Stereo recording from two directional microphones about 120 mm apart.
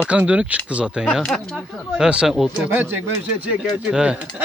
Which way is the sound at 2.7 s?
15° right (ahead or behind).